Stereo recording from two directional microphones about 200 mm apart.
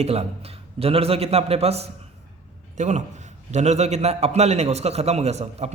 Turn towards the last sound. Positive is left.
turn(degrees=-30)  # may be behind; listen again after turning